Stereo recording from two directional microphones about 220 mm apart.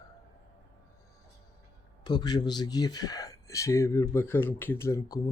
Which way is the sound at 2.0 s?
20° left (ahead or behind).